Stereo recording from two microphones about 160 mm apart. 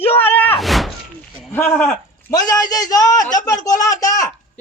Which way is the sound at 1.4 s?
10° left (ahead or behind).